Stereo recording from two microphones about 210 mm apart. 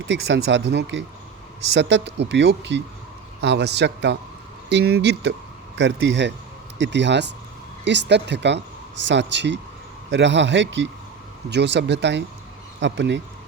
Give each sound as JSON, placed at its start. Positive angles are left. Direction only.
{"t": 0.1, "sound": "speech", "side_deg": -60}